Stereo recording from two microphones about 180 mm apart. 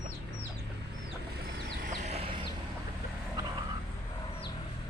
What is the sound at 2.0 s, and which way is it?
Chicken, 35° right (ahead or behind).